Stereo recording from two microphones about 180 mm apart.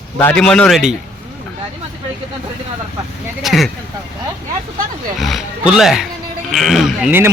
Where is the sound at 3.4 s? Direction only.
Centre (ahead or behind).